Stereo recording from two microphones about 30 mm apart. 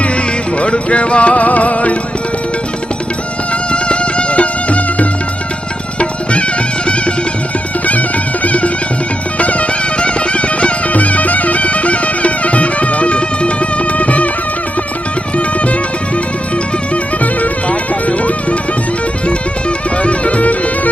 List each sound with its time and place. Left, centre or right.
0.6 s music: left
3.7 s music: left
8.4 s music: left
10.9 s music: left
17.4 s music: left
20.0 s bagpipes: left